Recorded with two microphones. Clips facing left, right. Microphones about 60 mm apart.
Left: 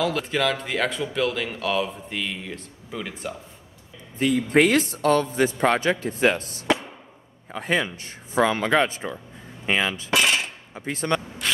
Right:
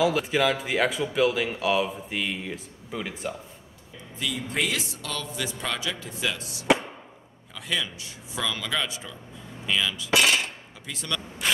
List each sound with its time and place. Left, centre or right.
0.0 s speech: centre
4.2 s a man's voice: left
10.1 s a sound: centre
10.7 s speech: left